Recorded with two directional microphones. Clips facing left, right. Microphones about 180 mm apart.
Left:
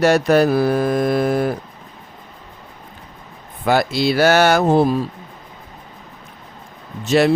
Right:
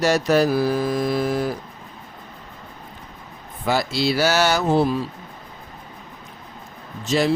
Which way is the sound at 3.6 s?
60° left (ahead or behind).